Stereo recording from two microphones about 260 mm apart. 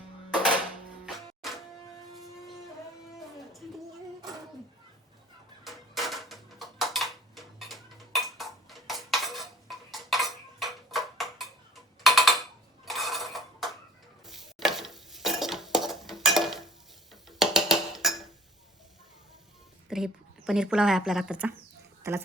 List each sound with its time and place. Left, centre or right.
1.4 s music: centre
5.6 s dishes: centre
12.0 s tick-tock: centre
12.8 s dishes: centre
14.3 s a sound: centre
19.9 s a woman's voice: centre